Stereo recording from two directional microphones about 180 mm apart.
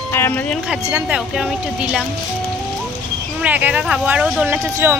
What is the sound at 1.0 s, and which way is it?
A woman's voice, 5° right (ahead or behind).